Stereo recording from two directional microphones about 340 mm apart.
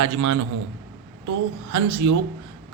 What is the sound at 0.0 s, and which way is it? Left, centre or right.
Speech, right.